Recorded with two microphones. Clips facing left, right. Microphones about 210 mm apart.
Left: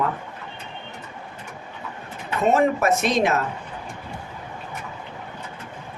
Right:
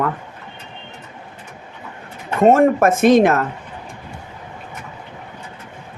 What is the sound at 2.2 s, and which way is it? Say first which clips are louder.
Speech: right 7 dB; 50° right (ahead or behind).